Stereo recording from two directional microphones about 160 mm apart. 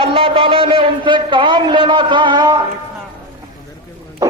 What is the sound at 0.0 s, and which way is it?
A man's voice, 35° right (ahead or behind).